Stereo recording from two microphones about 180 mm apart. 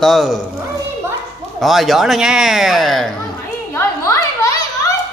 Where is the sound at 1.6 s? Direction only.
Centre (ahead or behind).